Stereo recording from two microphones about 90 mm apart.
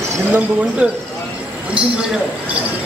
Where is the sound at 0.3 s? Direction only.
15° right (ahead or behind).